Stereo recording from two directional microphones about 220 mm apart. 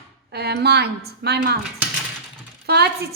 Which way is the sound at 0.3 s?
50° right (ahead or behind).